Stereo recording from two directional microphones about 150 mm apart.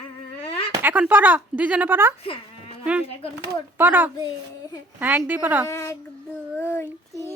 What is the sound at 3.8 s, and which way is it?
Speech, 10° right (ahead or behind).